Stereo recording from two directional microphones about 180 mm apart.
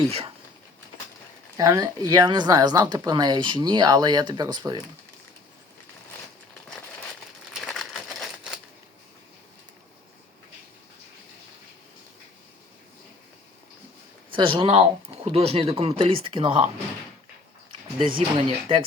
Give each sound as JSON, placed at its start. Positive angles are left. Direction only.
{"t": 0.1, "sound": "speech", "side_deg": -35}
{"t": 1.5, "sound": "speech", "side_deg": -20}
{"t": 7.5, "sound": "a sound", "side_deg": 0}
{"t": 14.3, "sound": "speech", "side_deg": -30}
{"t": 18.3, "sound": "speech", "side_deg": -30}